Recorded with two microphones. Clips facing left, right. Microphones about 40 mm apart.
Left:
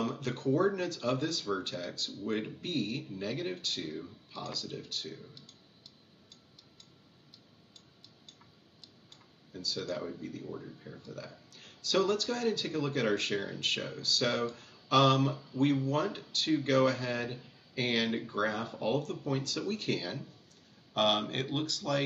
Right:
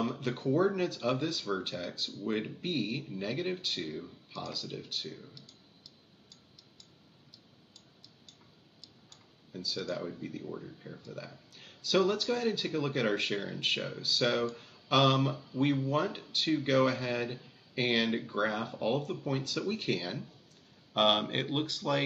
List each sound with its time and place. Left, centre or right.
0.0 s speech: centre
9.5 s speech: centre
9.8 s speech: centre
10.2 s speech: centre
14.5 s a sound: centre
15.0 s speech: centre